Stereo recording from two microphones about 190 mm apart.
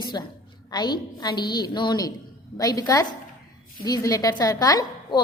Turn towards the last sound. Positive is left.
turn(degrees=20)  # may be behind; listen again after turning